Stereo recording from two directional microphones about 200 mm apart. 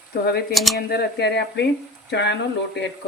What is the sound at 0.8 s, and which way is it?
Speech, 50° left (ahead or behind).